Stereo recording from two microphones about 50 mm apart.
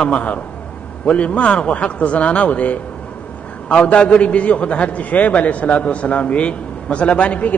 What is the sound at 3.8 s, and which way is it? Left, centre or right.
A man's voice, left.